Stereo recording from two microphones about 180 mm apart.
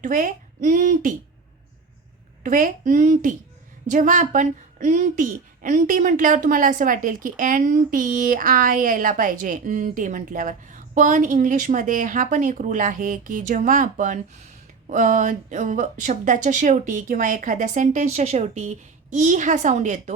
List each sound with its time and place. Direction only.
0.0 s a child's voice: 50° right (ahead or behind)
2.4 s speech: 50° right (ahead or behind)